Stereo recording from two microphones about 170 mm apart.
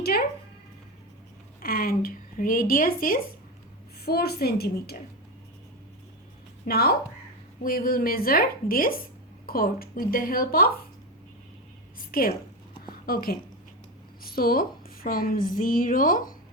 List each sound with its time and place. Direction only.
1.6 s a woman's voice: 60° left (ahead or behind)
4.0 s a woman's voice: 70° left (ahead or behind)
6.7 s a woman's voice: 65° left (ahead or behind)
11.9 s a woman's voice: 60° left (ahead or behind)
12.9 s a sound: 60° left (ahead or behind)
14.3 s a woman's voice: 60° left (ahead or behind)